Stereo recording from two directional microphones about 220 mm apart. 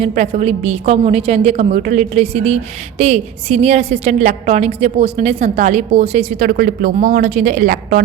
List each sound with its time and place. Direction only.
0.0 s a woman's voice: 30° right (ahead or behind)